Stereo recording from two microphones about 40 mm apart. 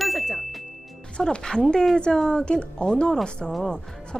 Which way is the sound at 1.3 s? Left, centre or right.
Centre.